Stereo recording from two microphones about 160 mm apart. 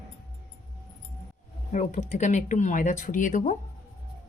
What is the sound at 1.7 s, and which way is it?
Speech, 45° left (ahead or behind).